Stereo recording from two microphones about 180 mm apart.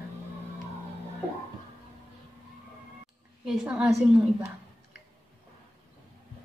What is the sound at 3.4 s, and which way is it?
Speech, 5° right (ahead or behind).